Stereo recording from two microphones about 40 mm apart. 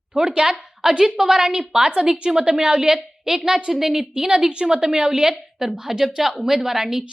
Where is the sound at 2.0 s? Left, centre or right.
Right.